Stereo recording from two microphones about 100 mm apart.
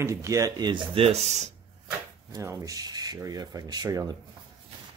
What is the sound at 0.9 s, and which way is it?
Speech, 90° right.